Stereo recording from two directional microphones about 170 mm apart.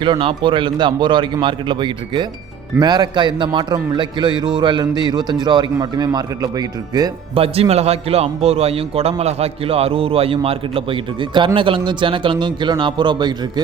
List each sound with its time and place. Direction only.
0.0 s a man's voice: 30° right (ahead or behind)